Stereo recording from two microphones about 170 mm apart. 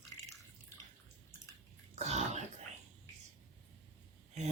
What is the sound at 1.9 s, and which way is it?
Throat clearing, 40° right (ahead or behind).